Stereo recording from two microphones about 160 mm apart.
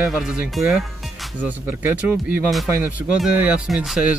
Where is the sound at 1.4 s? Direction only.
10° right (ahead or behind).